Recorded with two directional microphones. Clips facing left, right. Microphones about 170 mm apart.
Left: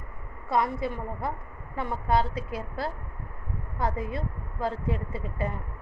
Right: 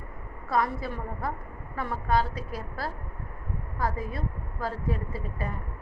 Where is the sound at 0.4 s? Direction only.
20° left (ahead or behind).